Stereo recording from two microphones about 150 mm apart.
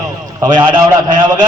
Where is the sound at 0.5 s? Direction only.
10° right (ahead or behind).